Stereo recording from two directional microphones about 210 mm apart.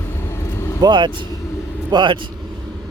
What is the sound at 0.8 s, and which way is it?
Speech, 20° right (ahead or behind).